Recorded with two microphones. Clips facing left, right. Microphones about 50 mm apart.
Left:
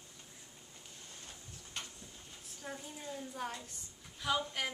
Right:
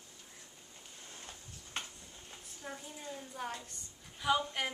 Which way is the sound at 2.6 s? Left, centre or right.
Centre.